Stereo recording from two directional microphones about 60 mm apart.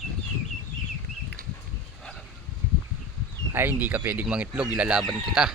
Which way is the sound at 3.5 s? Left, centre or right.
Right.